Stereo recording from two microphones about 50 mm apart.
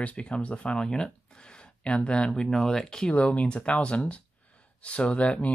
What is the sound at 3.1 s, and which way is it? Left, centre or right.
Speech, left.